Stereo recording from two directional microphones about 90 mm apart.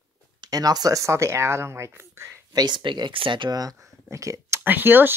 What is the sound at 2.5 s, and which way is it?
Speech, 55° right (ahead or behind).